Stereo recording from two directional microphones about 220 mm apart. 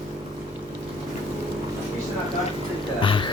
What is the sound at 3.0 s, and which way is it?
Music, 25° left (ahead or behind).